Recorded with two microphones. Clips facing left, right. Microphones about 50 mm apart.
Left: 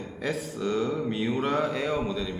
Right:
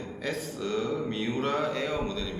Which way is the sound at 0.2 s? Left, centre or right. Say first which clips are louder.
Left 3 dB; centre.